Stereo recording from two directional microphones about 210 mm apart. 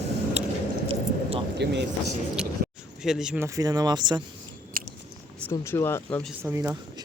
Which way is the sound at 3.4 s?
15° right (ahead or behind).